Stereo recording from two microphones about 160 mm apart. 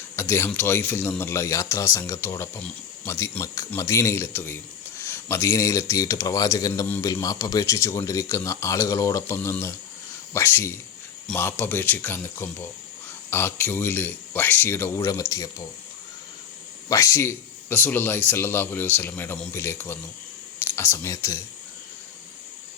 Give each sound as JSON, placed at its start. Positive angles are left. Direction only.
{"t": 0.2, "sound": "speech", "side_deg": 15}
{"t": 16.9, "sound": "speech", "side_deg": 20}